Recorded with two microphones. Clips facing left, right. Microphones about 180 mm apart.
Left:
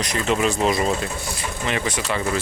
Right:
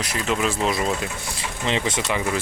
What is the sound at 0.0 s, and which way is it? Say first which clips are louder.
Speech: left 3 dB; 5° right (ahead or behind).